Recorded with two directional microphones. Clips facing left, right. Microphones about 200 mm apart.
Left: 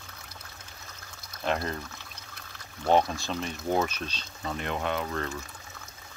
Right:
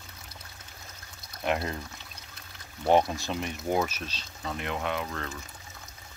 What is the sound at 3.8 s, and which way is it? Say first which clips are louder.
Speech: left 2 dB; 5° right (ahead or behind).